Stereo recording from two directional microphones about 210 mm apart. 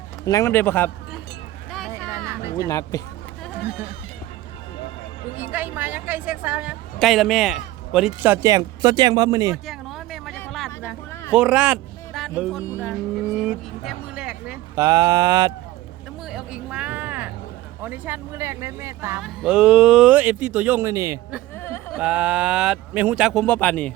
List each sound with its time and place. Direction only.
0.3 s a man's voice: 15° left (ahead or behind)
2.1 s a sound: 15° right (ahead or behind)
2.6 s a man's voice: 15° left (ahead or behind)
5.4 s a woman's voice: 10° right (ahead or behind)
9.6 s music: centre (ahead or behind)
11.3 s a man's voice: 5° right (ahead or behind)
12.5 s a man's voice: 15° left (ahead or behind)
12.8 s vehicle: centre (ahead or behind)
14.8 s a woman's voice: 15° right (ahead or behind)
16.3 s a sound: 5° right (ahead or behind)
17.8 s a woman's voice: 10° right (ahead or behind)
19.2 s speech: centre (ahead or behind)
21.6 s a sound: 10° left (ahead or behind)
21.9 s speech: 5° right (ahead or behind)